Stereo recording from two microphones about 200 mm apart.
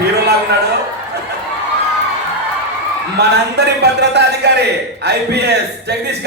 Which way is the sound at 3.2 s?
55° right (ahead or behind).